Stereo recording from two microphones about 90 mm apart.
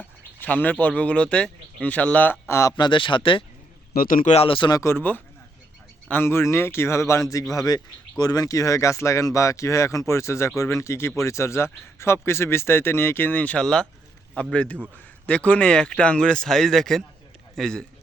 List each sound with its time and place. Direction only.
0.3 s speech: 20° left (ahead or behind)
2.5 s speech: 35° left (ahead or behind)
2.7 s speech: 65° left (ahead or behind)
4.4 s speech: 70° left (ahead or behind)
4.7 s speech: 30° left (ahead or behind)
6.2 s speech: 30° left (ahead or behind)
7.5 s speech: 45° left (ahead or behind); by 17.8 s 5° left (ahead or behind)